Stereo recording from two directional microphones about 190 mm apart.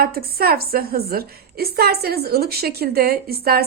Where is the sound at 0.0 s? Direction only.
55° right (ahead or behind).